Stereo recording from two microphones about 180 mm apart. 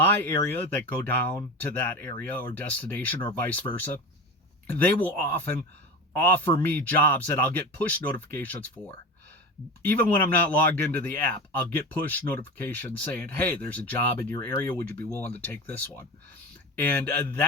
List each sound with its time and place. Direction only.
0.0 s speech: 15° left (ahead or behind)
9.8 s speech: 10° left (ahead or behind)